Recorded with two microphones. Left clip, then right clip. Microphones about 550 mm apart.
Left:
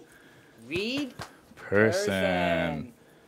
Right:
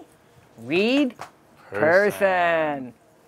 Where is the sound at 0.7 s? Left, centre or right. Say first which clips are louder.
Right 10 dB; right.